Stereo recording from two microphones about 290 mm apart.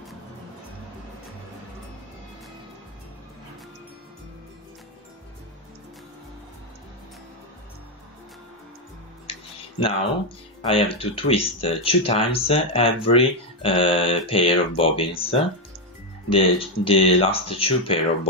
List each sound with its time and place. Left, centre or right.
9.3 s speech: centre
16.3 s speech: centre